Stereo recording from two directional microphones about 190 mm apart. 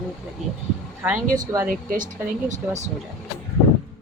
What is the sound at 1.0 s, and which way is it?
Speech, 5° right (ahead or behind).